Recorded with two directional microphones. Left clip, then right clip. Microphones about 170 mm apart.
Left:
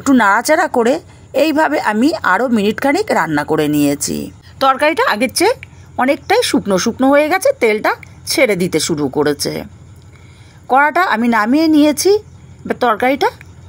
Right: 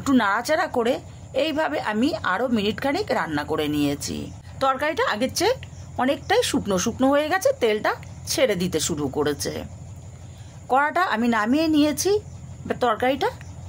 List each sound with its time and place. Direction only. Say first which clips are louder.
0.0 s a woman's voice: left 10 dB; 40° left (ahead or behind)
4.6 s a woman's voice: left 10 dB; 30° left (ahead or behind)
10.7 s a woman's voice: left 9 dB; 30° left (ahead or behind)